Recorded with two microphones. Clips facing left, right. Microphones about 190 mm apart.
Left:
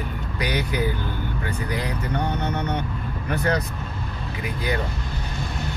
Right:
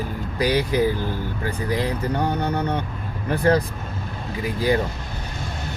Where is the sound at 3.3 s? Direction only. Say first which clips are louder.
Right 5 dB; 30° right (ahead or behind).